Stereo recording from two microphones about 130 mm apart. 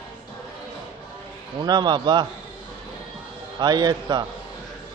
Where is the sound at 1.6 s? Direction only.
35° right (ahead or behind).